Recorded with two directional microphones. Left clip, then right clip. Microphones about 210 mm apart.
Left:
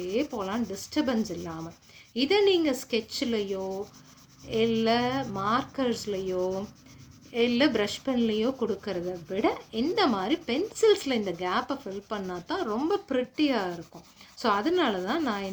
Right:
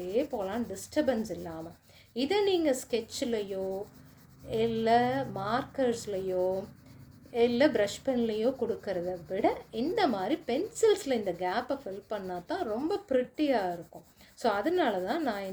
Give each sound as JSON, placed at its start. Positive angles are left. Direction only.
{"t": 0.1, "sound": "speech", "side_deg": 50}
{"t": 7.3, "sound": "speech", "side_deg": 50}